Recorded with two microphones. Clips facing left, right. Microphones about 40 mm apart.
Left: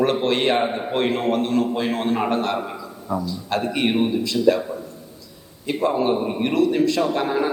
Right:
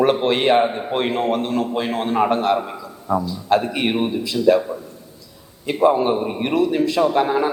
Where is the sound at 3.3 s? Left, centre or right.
Centre.